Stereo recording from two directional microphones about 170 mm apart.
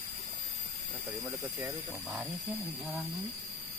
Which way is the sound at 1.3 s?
15° right (ahead or behind).